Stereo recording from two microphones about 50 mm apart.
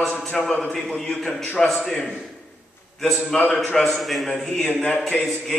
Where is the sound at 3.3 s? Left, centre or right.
Left.